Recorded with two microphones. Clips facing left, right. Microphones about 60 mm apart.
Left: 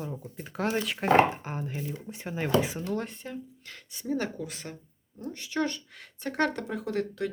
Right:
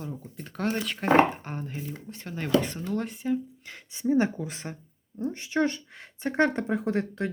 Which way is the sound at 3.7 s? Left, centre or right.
Centre.